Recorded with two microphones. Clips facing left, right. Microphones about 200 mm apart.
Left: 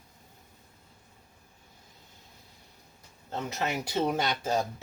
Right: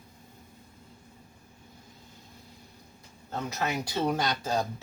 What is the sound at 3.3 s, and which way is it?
Speech, 25° left (ahead or behind).